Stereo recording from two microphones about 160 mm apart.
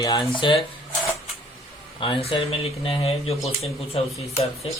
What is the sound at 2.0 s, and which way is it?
Speech, 35° left (ahead or behind).